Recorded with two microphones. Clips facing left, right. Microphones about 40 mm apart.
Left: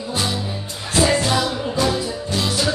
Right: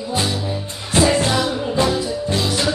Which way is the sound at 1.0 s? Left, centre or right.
Right.